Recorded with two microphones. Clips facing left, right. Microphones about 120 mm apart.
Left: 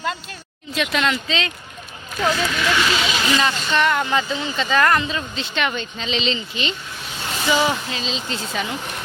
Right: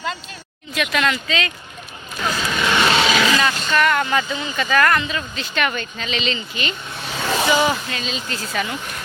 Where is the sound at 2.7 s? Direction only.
65° right (ahead or behind); by 3.3 s 90° right.